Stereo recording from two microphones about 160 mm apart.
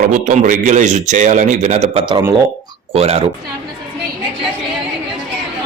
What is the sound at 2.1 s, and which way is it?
Speech, 25° right (ahead or behind).